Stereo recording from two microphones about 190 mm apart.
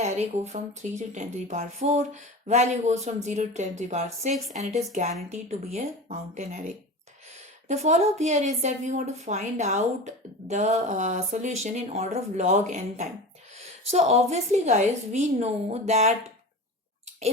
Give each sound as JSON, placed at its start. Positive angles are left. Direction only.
{"t": 0.0, "sound": "speech", "side_deg": -35}
{"t": 4.4, "sound": "speech", "side_deg": 0}
{"t": 5.0, "sound": "speech", "side_deg": -40}